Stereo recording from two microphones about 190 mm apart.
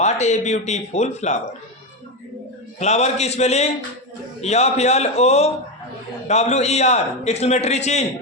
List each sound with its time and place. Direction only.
0.0 s a man's voice: 35° left (ahead or behind)
2.7 s a man's voice: 35° left (ahead or behind)